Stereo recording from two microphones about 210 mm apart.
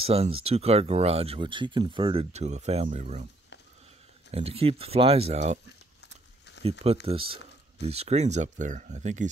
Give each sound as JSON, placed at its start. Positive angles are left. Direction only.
{"t": 0.0, "sound": "speech", "side_deg": -30}
{"t": 4.3, "sound": "speech", "side_deg": -30}
{"t": 6.6, "sound": "speech", "side_deg": -30}